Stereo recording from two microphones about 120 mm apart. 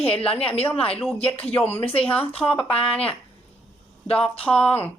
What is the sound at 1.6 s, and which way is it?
Speech, 55° left (ahead or behind).